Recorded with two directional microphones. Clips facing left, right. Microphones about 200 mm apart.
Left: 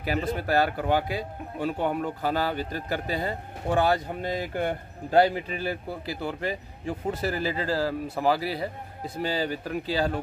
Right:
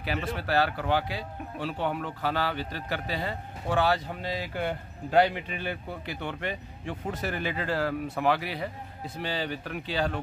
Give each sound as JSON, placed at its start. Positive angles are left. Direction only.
{"t": 0.0, "sound": "speech", "side_deg": 40}